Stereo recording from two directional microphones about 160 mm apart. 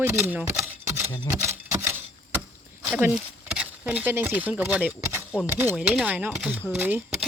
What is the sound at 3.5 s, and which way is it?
Speech, 10° right (ahead or behind).